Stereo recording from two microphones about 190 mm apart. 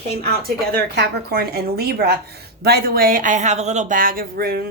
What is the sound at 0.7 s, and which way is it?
A woman's voice, 55° right (ahead or behind).